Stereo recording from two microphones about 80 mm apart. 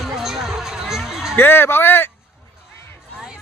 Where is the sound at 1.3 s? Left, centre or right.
Left.